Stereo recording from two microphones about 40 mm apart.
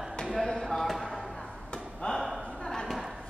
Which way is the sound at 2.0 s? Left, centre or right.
Left.